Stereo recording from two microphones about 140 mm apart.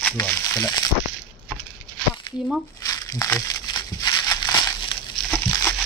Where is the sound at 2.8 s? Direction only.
25° left (ahead or behind).